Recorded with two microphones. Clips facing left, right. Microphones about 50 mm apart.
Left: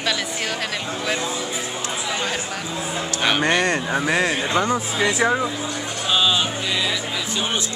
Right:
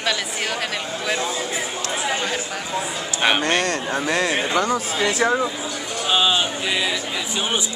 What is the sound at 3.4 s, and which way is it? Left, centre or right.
Speech, centre.